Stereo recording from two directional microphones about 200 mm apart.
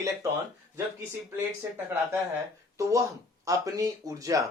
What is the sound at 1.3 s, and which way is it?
Speech, 15° right (ahead or behind).